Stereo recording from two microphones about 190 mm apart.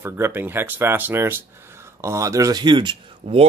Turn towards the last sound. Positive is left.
turn(degrees=-25)  # may be behind; listen again after turning